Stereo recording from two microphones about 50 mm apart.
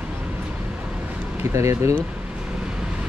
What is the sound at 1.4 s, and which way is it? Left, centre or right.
Speech, right.